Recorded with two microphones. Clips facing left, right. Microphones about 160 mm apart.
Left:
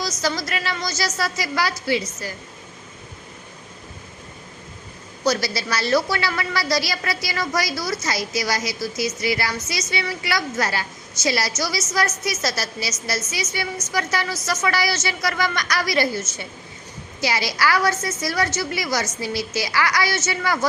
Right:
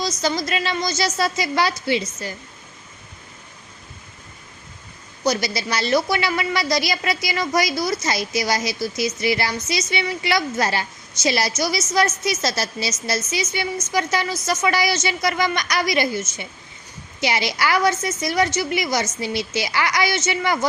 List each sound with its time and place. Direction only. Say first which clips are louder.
0.0 s a woman's voice: right 2 dB; 20° right (ahead or behind)
5.2 s a woman's voice: even; 20° right (ahead or behind)